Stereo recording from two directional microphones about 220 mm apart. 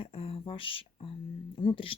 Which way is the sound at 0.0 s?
25° left (ahead or behind).